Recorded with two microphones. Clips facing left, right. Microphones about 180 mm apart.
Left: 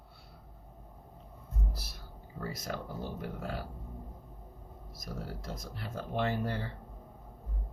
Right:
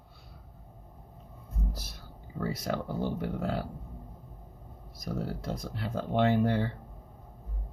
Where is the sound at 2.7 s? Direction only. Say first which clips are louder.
Right 7 dB; 75° right (ahead or behind).